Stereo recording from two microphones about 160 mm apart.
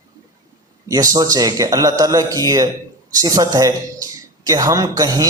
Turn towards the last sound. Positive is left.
turn(degrees=-25)  # may be behind; listen again after turning